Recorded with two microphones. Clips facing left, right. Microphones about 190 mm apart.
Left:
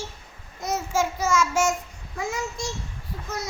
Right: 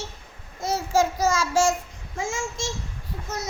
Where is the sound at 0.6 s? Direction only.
30° right (ahead or behind).